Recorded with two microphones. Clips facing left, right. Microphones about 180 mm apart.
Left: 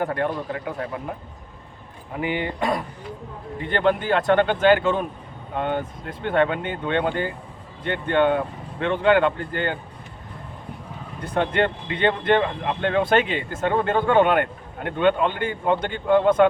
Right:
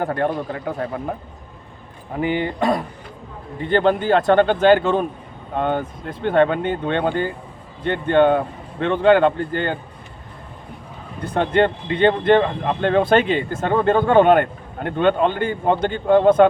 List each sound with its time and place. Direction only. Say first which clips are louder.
0.0 s speech: right 3 dB; 35° right (ahead or behind)
2.1 s speech: right 4 dB; 35° right (ahead or behind)
11.3 s speech: right 4 dB; 35° right (ahead or behind)